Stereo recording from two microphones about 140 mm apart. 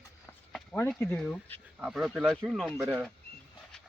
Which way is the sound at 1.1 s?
10° left (ahead or behind).